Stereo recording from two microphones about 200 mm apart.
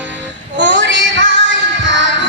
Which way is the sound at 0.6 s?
65° right (ahead or behind).